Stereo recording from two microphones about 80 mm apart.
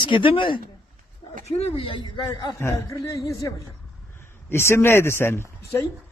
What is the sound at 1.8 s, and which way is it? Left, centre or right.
Speech, left.